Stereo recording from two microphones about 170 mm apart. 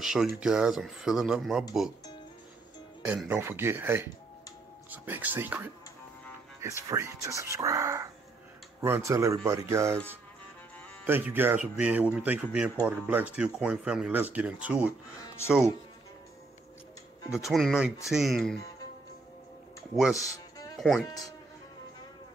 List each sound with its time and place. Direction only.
0.0 s speech: 5° right (ahead or behind)
3.1 s speech: 10° right (ahead or behind)
11.1 s speech: 10° right (ahead or behind)
17.4 s speech: centre (ahead or behind)
20.2 s music: 20° left (ahead or behind)
20.8 s speech: centre (ahead or behind)